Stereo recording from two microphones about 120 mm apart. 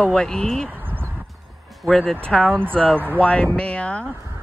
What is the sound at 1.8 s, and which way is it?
Speech, 5° left (ahead or behind).